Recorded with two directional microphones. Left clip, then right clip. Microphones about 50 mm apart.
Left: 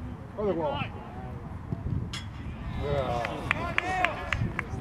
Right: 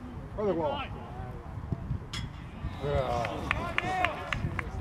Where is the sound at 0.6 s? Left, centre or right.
Centre.